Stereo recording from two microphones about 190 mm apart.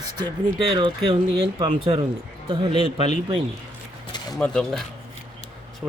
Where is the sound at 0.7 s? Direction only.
25° right (ahead or behind).